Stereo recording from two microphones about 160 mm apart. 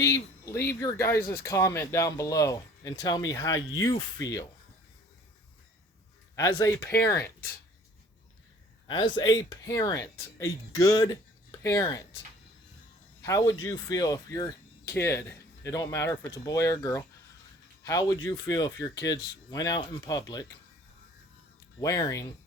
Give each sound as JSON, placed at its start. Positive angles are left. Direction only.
{"t": 0.0, "sound": "speech", "side_deg": 20}
{"t": 6.3, "sound": "speech", "side_deg": 20}
{"t": 8.9, "sound": "speech", "side_deg": 30}
{"t": 13.2, "sound": "speech", "side_deg": 20}
{"t": 21.8, "sound": "speech", "side_deg": 20}